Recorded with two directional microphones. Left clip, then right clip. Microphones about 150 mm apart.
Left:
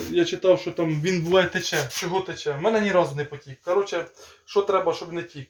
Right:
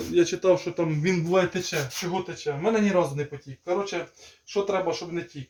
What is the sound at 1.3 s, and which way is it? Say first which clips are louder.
Speech: left 5 dB; 20° right (ahead or behind).